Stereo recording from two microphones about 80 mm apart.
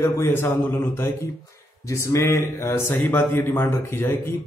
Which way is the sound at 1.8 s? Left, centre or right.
Left.